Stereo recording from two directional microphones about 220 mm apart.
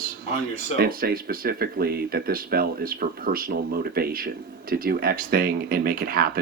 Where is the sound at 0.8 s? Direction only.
40° right (ahead or behind).